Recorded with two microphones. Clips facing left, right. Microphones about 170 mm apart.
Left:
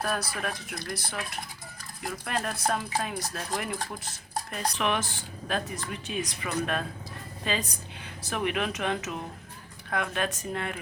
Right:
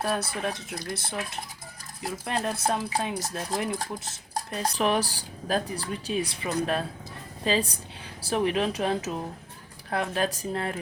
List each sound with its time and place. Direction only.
0.0 s speech: 25° right (ahead or behind)